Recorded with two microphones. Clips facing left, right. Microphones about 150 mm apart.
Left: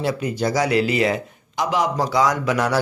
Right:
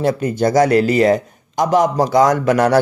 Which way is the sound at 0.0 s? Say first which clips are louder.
Right 6 dB; 50° right (ahead or behind).